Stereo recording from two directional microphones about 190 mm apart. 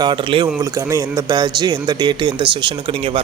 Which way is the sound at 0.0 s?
25° right (ahead or behind).